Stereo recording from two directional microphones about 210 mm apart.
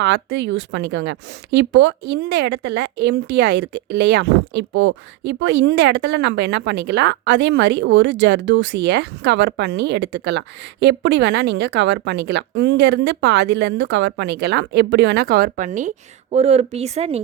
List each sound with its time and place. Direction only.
0.0 s a woman's voice: 55° right (ahead or behind); by 17.2 s 30° right (ahead or behind)